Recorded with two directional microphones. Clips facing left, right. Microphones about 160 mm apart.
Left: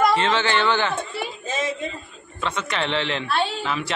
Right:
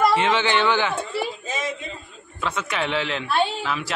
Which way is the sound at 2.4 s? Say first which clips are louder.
Even; 5° right (ahead or behind).